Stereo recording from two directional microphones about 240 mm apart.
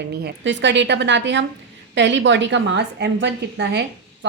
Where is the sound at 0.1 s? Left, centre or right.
Right.